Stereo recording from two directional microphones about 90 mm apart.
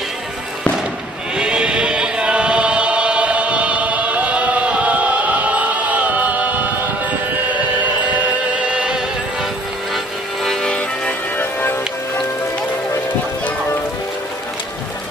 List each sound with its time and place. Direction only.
1.4 s choir: 10° right (ahead or behind)
8.6 s music: 10° right (ahead or behind)
10.4 s music: 5° left (ahead or behind)
11.3 s music: 25° left (ahead or behind)